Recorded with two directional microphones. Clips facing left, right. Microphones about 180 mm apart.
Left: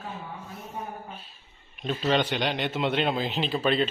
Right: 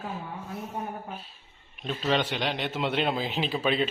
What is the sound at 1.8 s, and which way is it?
A man's voice, centre (ahead or behind).